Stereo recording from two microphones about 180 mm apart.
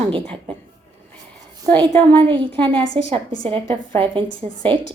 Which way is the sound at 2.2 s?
30° right (ahead or behind).